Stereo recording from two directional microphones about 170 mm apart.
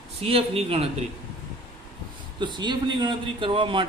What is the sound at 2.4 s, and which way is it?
A man's voice, 25° right (ahead or behind).